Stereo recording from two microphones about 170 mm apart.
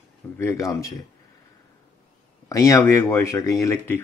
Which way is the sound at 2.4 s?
20° left (ahead or behind).